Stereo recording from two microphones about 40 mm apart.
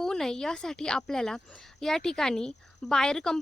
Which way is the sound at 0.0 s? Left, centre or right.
Centre.